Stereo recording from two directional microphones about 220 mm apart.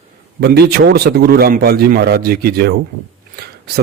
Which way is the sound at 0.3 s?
50° right (ahead or behind).